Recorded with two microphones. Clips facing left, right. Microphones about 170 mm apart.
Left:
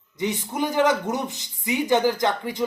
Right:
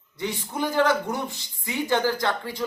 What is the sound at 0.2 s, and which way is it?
A man's voice, 20° left (ahead or behind).